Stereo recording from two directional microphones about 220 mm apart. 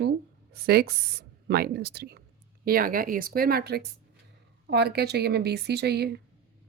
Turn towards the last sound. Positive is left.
turn(degrees=-50)  # may be behind; listen again after turning